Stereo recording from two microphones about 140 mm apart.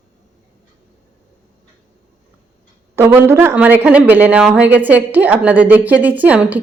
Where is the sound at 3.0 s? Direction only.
20° right (ahead or behind).